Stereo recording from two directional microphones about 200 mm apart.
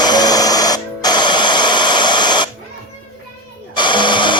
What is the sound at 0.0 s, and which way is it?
Music, 20° left (ahead or behind).